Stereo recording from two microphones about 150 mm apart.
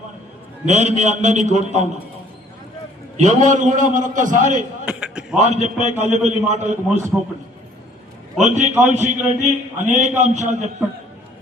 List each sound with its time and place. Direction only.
0.6 s a man's voice: 50° right (ahead or behind)
3.2 s a man's voice: 55° right (ahead or behind)
4.9 s a sound: 5° right (ahead or behind)
5.4 s a man's voice: 50° right (ahead or behind)
7.1 s a man's voice: 5° right (ahead or behind)
8.4 s a man's voice: 50° right (ahead or behind)
8.7 s a man's voice: 15° right (ahead or behind)
9.4 s a man's voice: 50° right (ahead or behind)